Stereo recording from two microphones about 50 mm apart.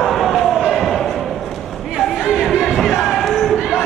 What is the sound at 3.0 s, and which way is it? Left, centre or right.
Crowd, centre.